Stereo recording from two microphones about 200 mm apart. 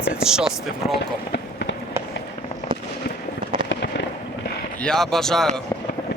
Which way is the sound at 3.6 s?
60° left (ahead or behind).